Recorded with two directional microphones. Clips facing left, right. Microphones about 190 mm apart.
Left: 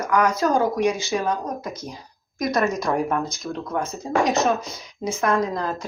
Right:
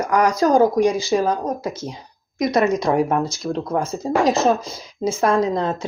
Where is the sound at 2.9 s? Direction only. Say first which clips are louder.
Right 4 dB; 25° right (ahead or behind).